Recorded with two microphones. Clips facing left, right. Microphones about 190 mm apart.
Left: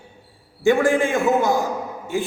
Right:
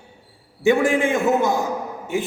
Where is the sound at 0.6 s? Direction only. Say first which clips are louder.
Even; 20° right (ahead or behind).